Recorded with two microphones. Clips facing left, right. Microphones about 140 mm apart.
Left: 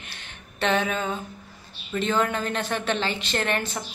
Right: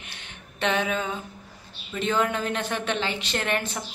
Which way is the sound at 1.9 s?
10° right (ahead or behind).